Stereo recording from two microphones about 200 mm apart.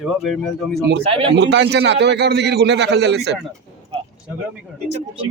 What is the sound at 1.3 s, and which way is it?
A man's voice, 60° right (ahead or behind).